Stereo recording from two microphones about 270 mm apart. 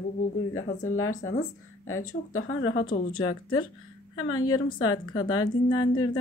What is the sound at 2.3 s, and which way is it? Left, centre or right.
A woman's voice, left.